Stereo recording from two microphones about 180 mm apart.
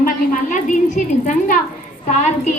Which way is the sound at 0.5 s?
45° left (ahead or behind).